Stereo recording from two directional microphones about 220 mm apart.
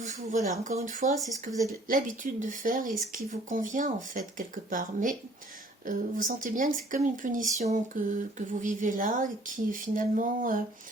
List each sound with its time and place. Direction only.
0.0 s speech: 35° right (ahead or behind)